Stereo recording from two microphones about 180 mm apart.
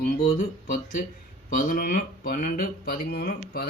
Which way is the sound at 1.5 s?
50° left (ahead or behind).